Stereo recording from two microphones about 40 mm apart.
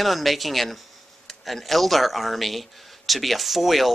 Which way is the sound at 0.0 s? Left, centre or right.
Centre.